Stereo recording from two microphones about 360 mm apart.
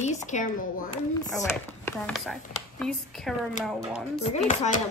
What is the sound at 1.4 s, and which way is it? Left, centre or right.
Speech, centre.